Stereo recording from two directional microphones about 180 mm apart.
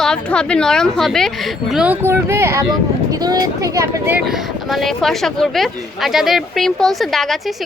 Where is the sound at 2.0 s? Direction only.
15° right (ahead or behind).